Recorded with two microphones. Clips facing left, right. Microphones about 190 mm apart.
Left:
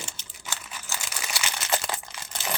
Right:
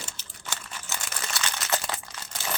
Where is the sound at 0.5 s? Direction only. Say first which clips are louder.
Even; 10° left (ahead or behind).